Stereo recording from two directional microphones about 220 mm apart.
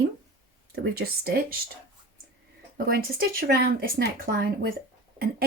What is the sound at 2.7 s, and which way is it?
Speech, 40° right (ahead or behind).